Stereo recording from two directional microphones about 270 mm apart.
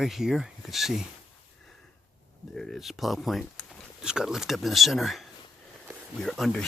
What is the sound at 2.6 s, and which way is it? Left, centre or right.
Speech, centre.